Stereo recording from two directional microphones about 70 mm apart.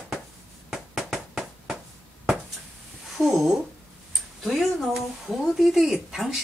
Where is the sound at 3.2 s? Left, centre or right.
Centre.